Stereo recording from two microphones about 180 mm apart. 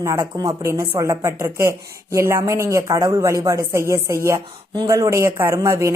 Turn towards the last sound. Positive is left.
turn(degrees=-15)  # may be behind; listen again after turning